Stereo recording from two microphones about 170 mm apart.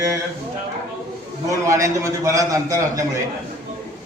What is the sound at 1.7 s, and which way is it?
A man's voice, 20° right (ahead or behind).